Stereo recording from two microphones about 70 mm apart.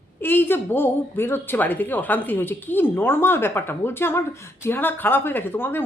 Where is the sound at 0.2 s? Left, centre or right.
Left.